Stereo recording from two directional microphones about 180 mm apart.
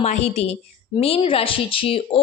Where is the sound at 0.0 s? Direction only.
40° left (ahead or behind).